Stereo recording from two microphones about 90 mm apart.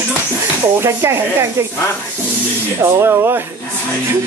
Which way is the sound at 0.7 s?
30° right (ahead or behind).